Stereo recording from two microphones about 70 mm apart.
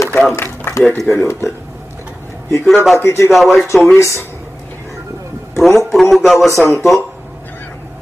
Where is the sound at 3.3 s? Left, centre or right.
Centre.